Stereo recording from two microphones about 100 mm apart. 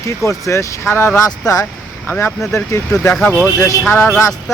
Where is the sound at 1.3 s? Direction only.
35° left (ahead or behind).